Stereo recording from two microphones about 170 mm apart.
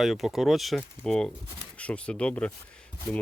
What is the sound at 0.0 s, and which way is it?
Speech, centre (ahead or behind).